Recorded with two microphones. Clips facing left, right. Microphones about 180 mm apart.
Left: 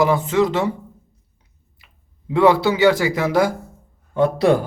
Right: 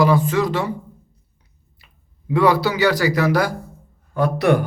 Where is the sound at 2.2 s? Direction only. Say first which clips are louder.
Left 2 dB; 25° left (ahead or behind).